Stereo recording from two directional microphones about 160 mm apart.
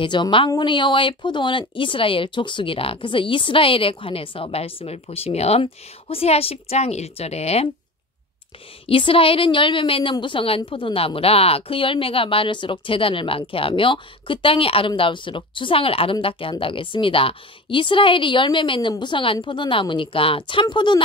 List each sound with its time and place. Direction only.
0.0 s a woman's voice: 30° left (ahead or behind)
8.8 s a woman's voice: 35° left (ahead or behind)